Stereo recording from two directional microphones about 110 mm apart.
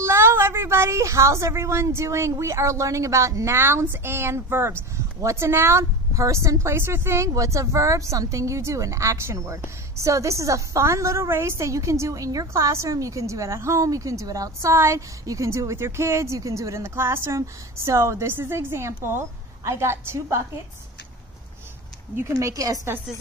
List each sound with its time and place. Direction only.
0.0 s a woman's voice: 25° right (ahead or behind)
22.1 s a woman's voice: 25° right (ahead or behind)